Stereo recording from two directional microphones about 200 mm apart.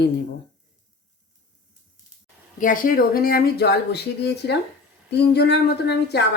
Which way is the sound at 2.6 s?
45° left (ahead or behind).